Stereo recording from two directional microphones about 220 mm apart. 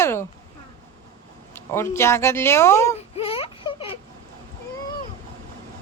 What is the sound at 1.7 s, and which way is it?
Speech, 10° left (ahead or behind).